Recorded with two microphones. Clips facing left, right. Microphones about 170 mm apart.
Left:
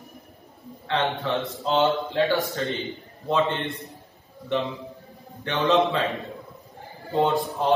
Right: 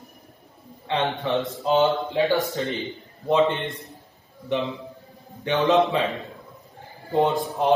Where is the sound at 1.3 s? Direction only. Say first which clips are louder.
Right 6 dB; centre (ahead or behind).